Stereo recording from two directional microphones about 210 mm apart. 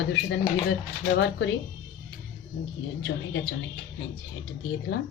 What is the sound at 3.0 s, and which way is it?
Speech, 60° left (ahead or behind).